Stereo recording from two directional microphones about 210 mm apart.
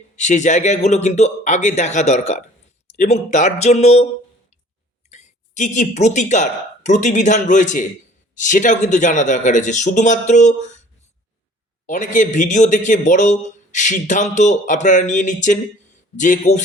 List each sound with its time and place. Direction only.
0.2 s a man's voice: 35° left (ahead or behind)
11.9 s a man's voice: 35° left (ahead or behind)